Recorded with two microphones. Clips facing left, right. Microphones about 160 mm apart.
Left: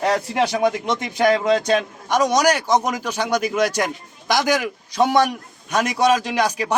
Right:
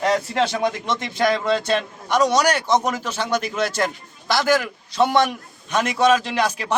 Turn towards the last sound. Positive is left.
turn(degrees=15)  # may be behind; listen again after turning